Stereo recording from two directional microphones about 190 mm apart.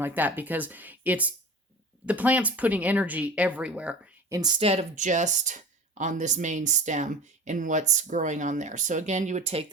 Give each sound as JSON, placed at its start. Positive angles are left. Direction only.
{"t": 0.0, "sound": "speech", "side_deg": -10}
{"t": 4.4, "sound": "speech", "side_deg": -25}